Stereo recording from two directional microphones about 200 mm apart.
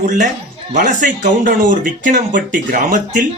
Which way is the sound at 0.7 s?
40° right (ahead or behind).